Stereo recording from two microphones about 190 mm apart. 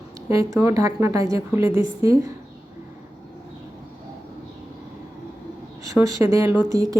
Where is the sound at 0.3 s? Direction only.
15° right (ahead or behind).